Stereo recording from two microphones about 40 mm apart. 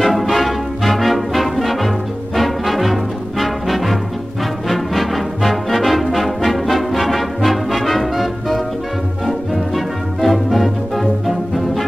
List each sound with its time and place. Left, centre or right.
0.0 s brass instrument: centre
2.3 s music: centre
4.6 s brass instrument: centre
9.8 s music: centre